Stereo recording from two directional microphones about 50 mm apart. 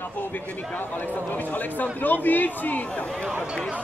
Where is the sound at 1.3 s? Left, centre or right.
Left.